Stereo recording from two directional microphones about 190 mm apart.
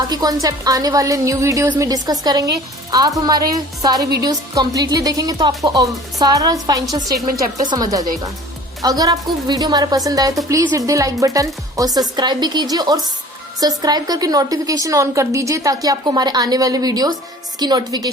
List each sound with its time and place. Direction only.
0.1 s a woman's voice: 20° right (ahead or behind)